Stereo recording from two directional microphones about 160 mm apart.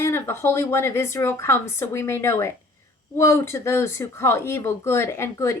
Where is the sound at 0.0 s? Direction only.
15° left (ahead or behind).